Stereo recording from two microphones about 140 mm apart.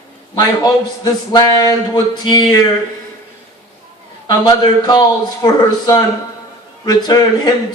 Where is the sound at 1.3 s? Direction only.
25° left (ahead or behind).